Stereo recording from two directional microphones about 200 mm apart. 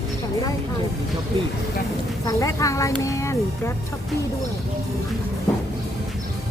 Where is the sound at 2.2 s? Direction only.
15° left (ahead or behind).